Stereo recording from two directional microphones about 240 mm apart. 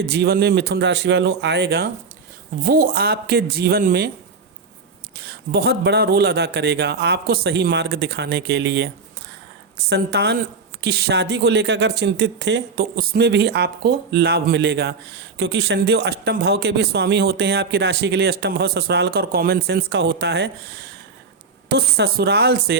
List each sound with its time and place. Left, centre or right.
0.0 s speech: right
5.2 s speech: right
9.9 s speech: right